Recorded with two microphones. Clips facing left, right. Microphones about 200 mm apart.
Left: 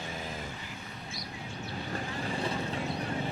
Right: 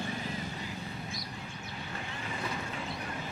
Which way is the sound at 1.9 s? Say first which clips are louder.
Left 6 dB; 35° left (ahead or behind).